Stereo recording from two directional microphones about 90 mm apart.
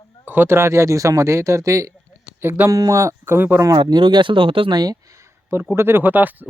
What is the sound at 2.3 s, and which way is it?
Speech, 25° right (ahead or behind).